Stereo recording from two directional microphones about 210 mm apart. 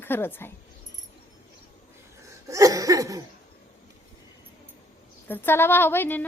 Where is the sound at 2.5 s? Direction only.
15° right (ahead or behind).